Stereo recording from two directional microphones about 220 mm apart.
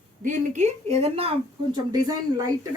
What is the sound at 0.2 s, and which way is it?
A woman's voice, 35° right (ahead or behind).